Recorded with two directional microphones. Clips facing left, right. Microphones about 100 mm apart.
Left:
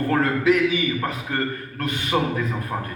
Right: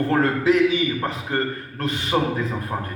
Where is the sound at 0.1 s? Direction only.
30° right (ahead or behind).